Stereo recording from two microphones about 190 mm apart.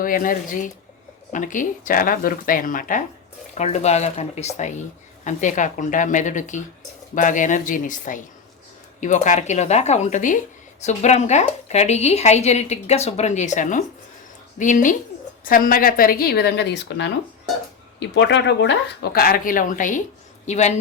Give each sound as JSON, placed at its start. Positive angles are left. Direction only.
{"t": 0.0, "sound": "speech", "side_deg": 45}